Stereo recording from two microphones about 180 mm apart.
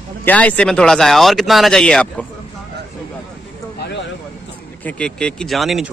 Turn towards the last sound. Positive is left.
turn(degrees=0)  # may be behind; listen again after turning